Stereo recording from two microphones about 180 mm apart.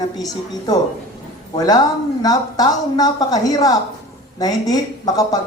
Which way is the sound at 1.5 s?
20° left (ahead or behind).